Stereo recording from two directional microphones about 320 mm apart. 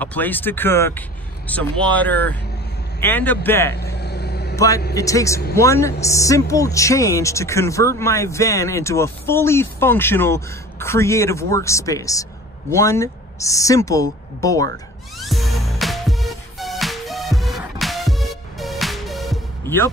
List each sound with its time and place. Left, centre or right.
0.0 s speech: centre
3.7 s vehicle: left
4.6 s a man's voice: centre
15.1 s music: centre